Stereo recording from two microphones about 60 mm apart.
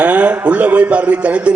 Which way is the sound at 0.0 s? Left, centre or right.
Right.